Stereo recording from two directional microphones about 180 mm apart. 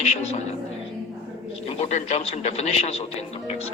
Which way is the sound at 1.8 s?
40° left (ahead or behind).